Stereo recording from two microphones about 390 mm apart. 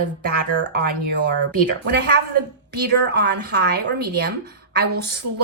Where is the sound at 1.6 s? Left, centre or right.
Right.